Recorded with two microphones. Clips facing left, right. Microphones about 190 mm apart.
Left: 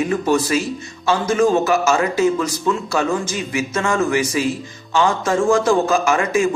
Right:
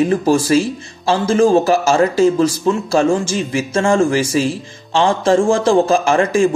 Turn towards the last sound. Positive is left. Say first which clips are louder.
# right 4 dB
turn(degrees=-30)  # may be behind; listen again after turning